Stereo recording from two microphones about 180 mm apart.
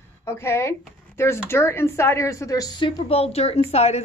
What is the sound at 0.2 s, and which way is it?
A woman's voice, 15° left (ahead or behind).